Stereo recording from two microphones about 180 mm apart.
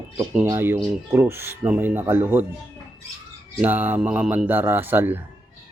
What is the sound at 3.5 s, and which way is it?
Speech, 10° right (ahead or behind).